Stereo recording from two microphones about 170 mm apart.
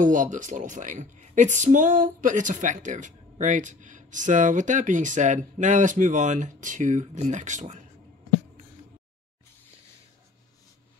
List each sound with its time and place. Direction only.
0.0 s speech: 50° right (ahead or behind)